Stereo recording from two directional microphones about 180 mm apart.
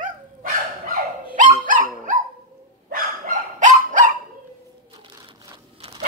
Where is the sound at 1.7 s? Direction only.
45° right (ahead or behind).